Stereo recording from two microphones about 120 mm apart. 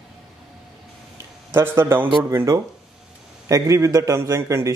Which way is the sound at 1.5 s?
20° right (ahead or behind).